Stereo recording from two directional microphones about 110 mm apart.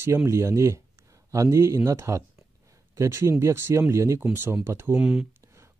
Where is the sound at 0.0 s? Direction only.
25° right (ahead or behind).